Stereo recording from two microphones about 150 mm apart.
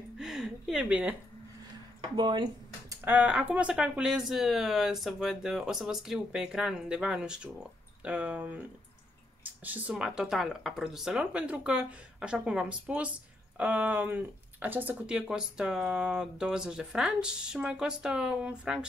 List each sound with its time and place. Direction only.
0.2 s a woman's voice: 5° right (ahead or behind)
2.1 s a sound: 30° right (ahead or behind)
3.1 s speech: 10° right (ahead or behind)